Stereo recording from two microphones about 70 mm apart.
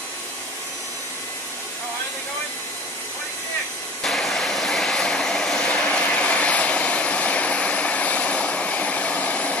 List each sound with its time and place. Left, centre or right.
4.0 s vehicle: centre; by 9.6 s left